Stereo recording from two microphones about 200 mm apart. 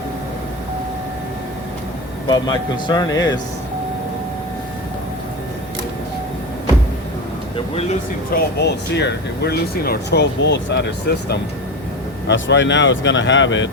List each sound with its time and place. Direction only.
2.2 s speech: 20° left (ahead or behind)
7.5 s speech: 30° left (ahead or behind)
8.3 s speech: 55° left (ahead or behind)